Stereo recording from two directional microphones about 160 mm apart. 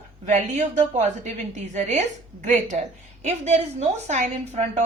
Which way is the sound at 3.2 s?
45° right (ahead or behind).